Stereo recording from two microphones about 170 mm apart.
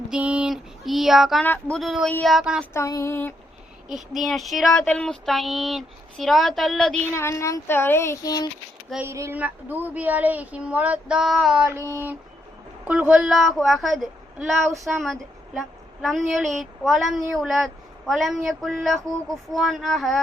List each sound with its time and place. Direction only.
0.1 s child singing: 5° right (ahead or behind)
1.7 s a woman's voice: centre (ahead or behind)
2.7 s speech: 15° left (ahead or behind)
3.8 s a woman's voice: centre (ahead or behind)
7.1 s speech: 15° left (ahead or behind)
9.0 s speech: 15° right (ahead or behind)
11.8 s a woman's voice: 15° right (ahead or behind); by 20.2 s centre (ahead or behind)